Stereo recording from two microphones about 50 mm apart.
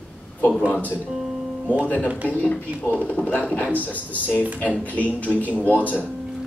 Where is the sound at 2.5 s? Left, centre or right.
Left.